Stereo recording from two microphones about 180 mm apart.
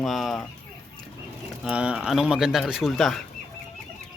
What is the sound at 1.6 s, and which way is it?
Speech, 5° right (ahead or behind).